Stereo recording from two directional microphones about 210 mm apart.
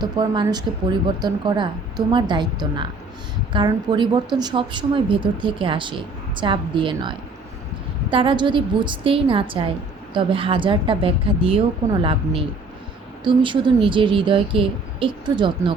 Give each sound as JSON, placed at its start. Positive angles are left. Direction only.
{"t": 0.0, "sound": "speech", "side_deg": -20}